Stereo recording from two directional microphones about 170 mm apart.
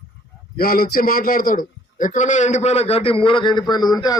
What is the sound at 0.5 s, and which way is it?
A man's voice, 60° left (ahead or behind).